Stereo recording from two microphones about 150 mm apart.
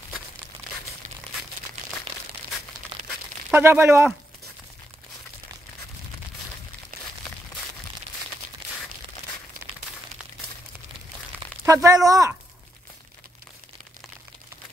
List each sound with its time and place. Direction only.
2.9 s tearing: 35° right (ahead or behind)
3.4 s speech: 15° right (ahead or behind)
11.6 s speech: 20° right (ahead or behind)